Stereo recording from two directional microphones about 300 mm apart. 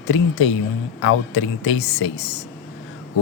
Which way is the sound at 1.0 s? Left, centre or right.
Left.